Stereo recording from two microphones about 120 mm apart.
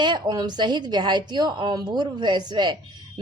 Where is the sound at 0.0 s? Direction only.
35° right (ahead or behind).